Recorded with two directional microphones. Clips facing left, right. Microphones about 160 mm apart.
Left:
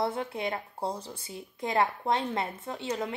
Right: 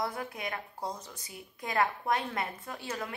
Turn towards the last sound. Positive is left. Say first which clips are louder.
# left 5 dB
turn(degrees=20)  # may be behind; listen again after turning